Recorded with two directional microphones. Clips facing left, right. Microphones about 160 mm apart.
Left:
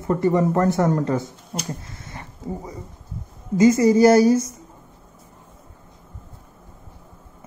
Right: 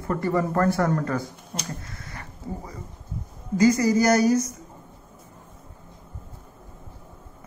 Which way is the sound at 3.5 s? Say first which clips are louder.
Left 4 dB; 25° left (ahead or behind).